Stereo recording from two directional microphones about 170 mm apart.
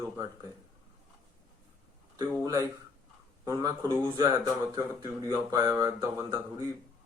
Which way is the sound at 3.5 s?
20° right (ahead or behind).